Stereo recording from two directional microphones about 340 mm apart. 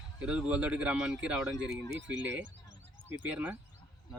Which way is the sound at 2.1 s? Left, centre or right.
Right.